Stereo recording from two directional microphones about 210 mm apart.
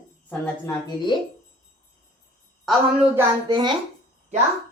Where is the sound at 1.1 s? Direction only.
20° left (ahead or behind).